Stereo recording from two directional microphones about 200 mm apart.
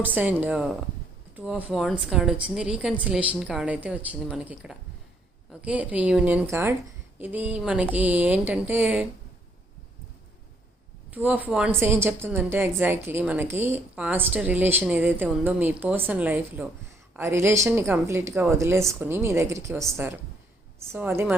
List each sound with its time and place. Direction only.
0.0 s a woman's voice: 10° right (ahead or behind)
11.1 s a woman's voice: 10° right (ahead or behind)
20.9 s a woman's voice: 10° right (ahead or behind)